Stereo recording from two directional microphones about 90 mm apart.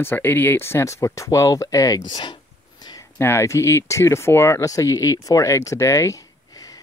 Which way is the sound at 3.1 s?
30° left (ahead or behind).